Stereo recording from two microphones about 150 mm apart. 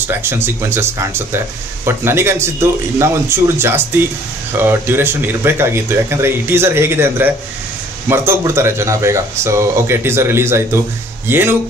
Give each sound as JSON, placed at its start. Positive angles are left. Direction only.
{"t": 0.0, "sound": "speech", "side_deg": -15}